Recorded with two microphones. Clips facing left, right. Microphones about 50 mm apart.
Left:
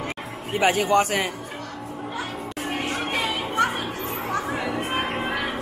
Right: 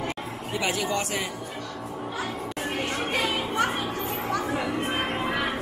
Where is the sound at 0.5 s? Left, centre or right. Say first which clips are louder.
Left 7 dB; left.